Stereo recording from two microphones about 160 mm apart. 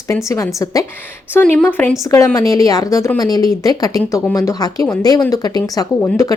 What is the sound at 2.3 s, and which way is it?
Speech, 20° left (ahead or behind).